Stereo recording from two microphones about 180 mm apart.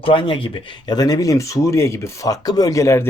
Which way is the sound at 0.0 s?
30° left (ahead or behind).